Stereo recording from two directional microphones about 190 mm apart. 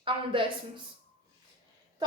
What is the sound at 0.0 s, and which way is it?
Speech, 25° right (ahead or behind).